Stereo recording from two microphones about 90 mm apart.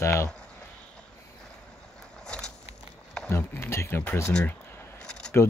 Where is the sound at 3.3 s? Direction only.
25° left (ahead or behind).